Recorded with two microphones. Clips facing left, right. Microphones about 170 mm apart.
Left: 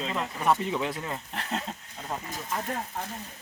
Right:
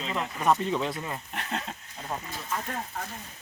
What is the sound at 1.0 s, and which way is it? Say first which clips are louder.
Speech: left 1 dB; 5° right (ahead or behind).